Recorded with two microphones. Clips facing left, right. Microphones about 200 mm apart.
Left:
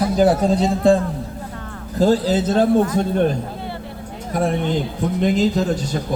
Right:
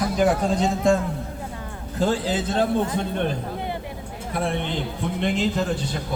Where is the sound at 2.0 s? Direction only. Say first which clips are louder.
Left 7 dB; 40° left (ahead or behind).